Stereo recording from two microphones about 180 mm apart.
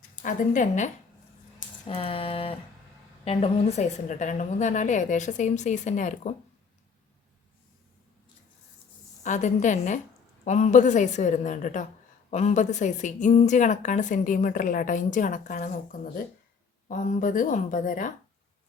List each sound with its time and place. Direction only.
0.2 s a woman's voice: 45° left (ahead or behind)
1.9 s a sound: 30° left (ahead or behind)
3.2 s a woman's voice: 35° left (ahead or behind)
9.2 s a woman's voice: 40° left (ahead or behind)